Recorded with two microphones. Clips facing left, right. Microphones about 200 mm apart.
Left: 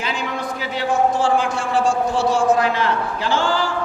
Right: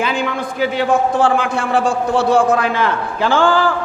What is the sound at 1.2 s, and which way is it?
A man's voice, 60° right (ahead or behind).